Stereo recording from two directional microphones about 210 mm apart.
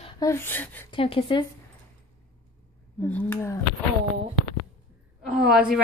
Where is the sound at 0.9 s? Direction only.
25° left (ahead or behind).